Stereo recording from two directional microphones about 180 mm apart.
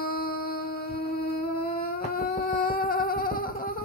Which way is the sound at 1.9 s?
50° left (ahead or behind).